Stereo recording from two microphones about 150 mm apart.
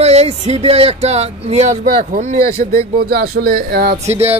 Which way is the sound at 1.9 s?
55° right (ahead or behind).